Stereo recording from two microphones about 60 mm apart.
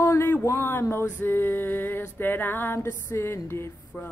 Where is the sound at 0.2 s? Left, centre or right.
Left.